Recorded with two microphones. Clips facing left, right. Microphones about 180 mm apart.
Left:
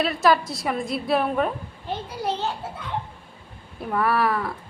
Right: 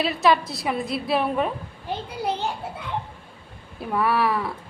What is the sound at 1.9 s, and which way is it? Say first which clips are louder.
Speech: even; 15° right (ahead or behind).